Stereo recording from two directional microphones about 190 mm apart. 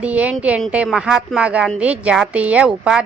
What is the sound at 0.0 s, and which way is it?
A woman's voice, 5° right (ahead or behind).